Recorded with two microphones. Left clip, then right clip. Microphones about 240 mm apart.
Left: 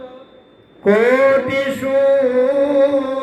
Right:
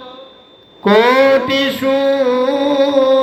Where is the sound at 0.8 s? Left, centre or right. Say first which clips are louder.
Right 2 dB; right.